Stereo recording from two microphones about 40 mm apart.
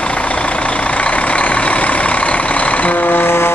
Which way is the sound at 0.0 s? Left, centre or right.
Left.